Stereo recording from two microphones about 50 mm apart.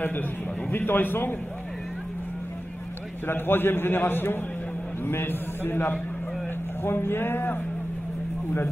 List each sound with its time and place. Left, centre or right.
0.7 s a man's voice: left
3.3 s a man's voice: left